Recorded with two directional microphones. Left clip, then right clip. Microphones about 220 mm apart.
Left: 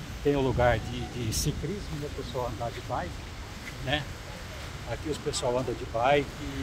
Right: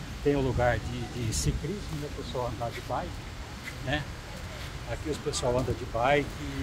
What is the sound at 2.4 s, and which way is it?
Speech, 15° left (ahead or behind).